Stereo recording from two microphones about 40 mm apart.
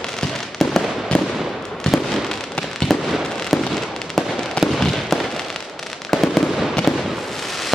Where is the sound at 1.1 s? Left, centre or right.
Left.